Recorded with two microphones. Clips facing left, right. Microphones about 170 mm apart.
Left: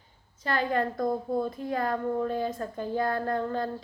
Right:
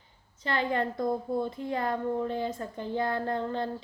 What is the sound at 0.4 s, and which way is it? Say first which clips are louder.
Speech: left 1 dB; 20° right (ahead or behind).